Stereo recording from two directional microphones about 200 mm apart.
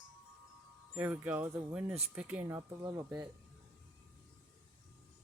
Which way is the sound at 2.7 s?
20° right (ahead or behind).